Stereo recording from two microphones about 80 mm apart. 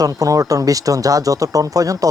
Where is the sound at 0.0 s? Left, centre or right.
Right.